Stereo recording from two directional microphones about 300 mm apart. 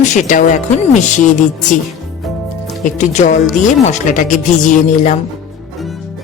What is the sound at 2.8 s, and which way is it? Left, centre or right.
Speech, left.